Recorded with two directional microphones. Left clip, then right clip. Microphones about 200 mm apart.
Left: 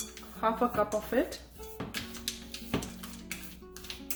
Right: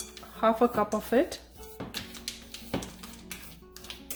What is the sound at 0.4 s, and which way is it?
Speech, 40° right (ahead or behind).